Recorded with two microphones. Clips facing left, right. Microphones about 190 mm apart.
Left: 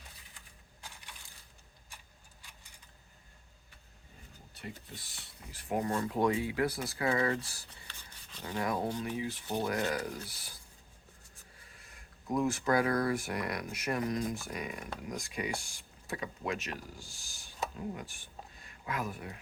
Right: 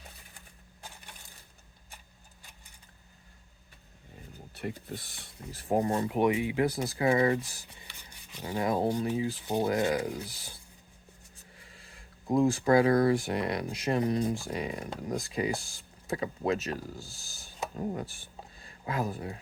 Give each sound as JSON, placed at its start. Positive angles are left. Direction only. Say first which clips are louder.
{"t": 4.5, "sound": "speech", "louder": "right 9 dB", "side_deg": -60}
{"t": 5.5, "sound": "speech", "louder": "right 5 dB", "side_deg": -35}
{"t": 12.3, "sound": "speech", "louder": "right 6 dB", "side_deg": -25}